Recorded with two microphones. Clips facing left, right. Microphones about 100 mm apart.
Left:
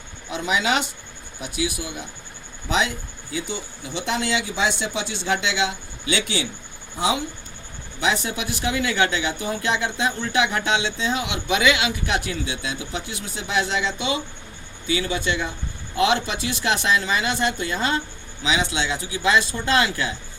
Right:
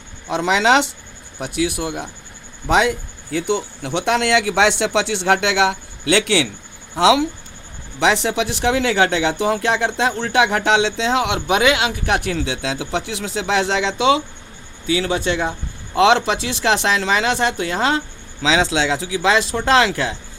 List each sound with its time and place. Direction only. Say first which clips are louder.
0.3 s speech: right 7 dB; 80° right
1.4 s speech: right 6 dB; 65° right (ahead or behind)
6.9 s speech: right 9 dB; 90° right
14.8 s speech: right 5 dB; 70° right (ahead or behind)
16.0 s speech: right 6 dB; 85° right
18.4 s speech: right 6 dB; 90° right